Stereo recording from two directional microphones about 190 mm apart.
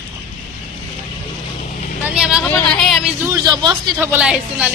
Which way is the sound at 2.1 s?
5° right (ahead or behind).